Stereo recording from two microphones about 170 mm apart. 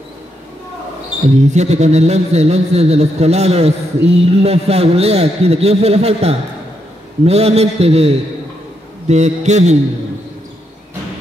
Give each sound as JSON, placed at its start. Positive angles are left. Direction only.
{"t": 1.3, "sound": "a man's voice", "side_deg": -40}